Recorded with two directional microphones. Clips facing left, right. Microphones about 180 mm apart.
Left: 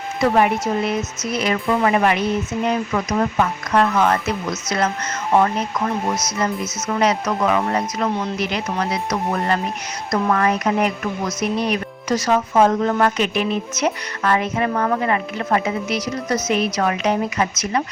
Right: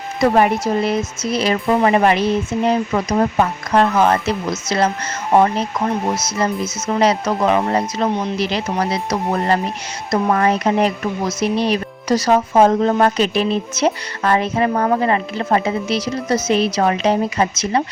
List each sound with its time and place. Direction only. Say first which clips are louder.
0.2 s speech: right 2 dB; 35° right (ahead or behind); by 8.4 s 20° right (ahead or behind)
8.4 s speech: right 3 dB; 30° right (ahead or behind)